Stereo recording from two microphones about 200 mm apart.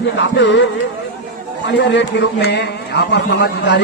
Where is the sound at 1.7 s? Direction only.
60° left (ahead or behind).